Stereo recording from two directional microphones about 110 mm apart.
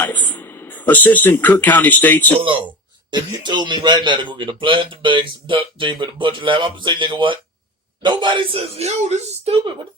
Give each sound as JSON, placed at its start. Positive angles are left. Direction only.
{"t": 0.0, "sound": "a man's voice", "side_deg": 15}
{"t": 2.4, "sound": "speech", "side_deg": -50}